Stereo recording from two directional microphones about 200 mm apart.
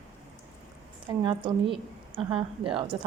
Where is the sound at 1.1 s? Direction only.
25° right (ahead or behind).